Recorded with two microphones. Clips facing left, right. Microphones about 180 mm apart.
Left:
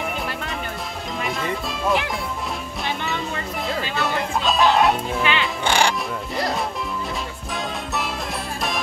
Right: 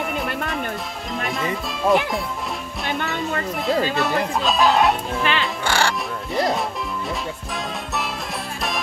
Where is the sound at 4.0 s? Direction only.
Centre (ahead or behind).